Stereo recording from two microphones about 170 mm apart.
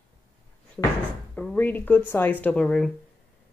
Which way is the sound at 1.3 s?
10° left (ahead or behind).